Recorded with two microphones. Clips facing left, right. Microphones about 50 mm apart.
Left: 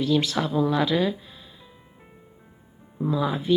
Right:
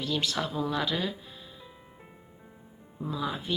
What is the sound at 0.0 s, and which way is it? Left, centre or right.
Speech, left.